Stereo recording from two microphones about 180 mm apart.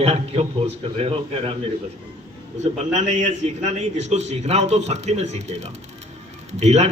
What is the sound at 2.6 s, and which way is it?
A man's voice, 40° right (ahead or behind).